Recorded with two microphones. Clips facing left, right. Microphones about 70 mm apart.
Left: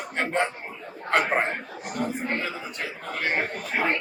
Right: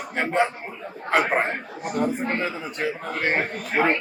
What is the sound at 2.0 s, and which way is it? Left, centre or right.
Speech, right.